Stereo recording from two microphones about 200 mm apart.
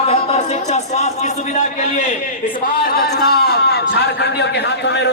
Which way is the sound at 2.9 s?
50° left (ahead or behind).